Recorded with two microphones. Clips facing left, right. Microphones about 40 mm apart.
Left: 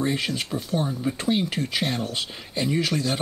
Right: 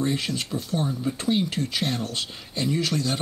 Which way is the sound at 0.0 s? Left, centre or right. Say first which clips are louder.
Left 1 dB; centre.